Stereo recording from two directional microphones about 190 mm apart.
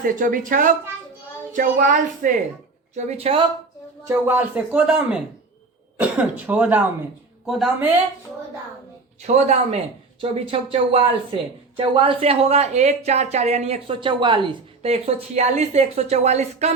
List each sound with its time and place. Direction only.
0.0 s speech: 45° right (ahead or behind)
2.9 s speech: 35° right (ahead or behind)
4.3 s a woman's voice: 5° right (ahead or behind)
9.2 s speech: 35° right (ahead or behind)